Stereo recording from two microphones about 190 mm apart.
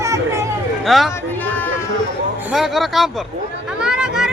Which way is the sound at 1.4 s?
10° left (ahead or behind).